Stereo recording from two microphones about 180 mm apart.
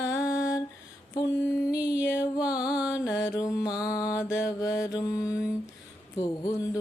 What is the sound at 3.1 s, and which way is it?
Mantra, 15° left (ahead or behind).